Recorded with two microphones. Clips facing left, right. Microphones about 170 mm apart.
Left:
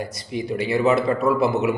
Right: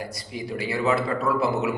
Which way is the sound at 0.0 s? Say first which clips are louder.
Left 5 dB; 20° left (ahead or behind).